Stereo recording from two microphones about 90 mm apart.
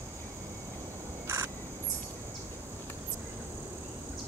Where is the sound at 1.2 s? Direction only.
35° right (ahead or behind).